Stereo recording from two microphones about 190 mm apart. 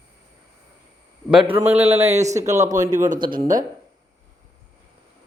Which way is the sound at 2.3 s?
15° right (ahead or behind).